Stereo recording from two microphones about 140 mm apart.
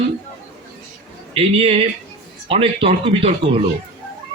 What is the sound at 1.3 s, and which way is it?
Speech, 45° right (ahead or behind).